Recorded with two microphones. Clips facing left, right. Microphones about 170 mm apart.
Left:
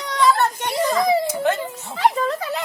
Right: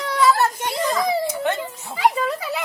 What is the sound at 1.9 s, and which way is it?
Speech, 10° right (ahead or behind).